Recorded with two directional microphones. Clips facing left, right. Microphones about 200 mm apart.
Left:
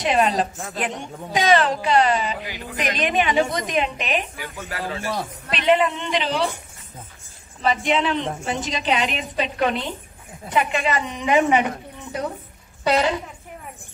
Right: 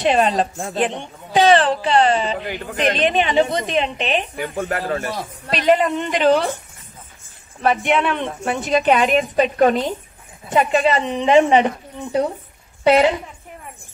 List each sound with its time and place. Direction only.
0.0 s a woman's voice: 30° right (ahead or behind)
2.4 s a woman's voice: 55° right (ahead or behind)
2.8 s a woman's voice: 30° right (ahead or behind)
4.4 s a man's voice: 55° right (ahead or behind)
7.6 s a woman's voice: 60° right (ahead or behind); by 11.7 s 30° right (ahead or behind)
12.8 s a woman's voice: 25° right (ahead or behind)